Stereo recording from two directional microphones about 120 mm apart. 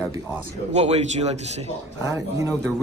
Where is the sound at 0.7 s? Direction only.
65° right (ahead or behind).